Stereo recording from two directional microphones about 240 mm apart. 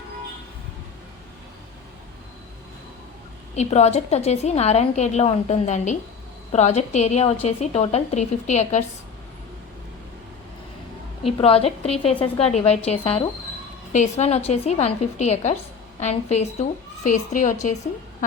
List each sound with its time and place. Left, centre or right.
3.5 s a woman's voice: left
11.3 s a woman's voice: left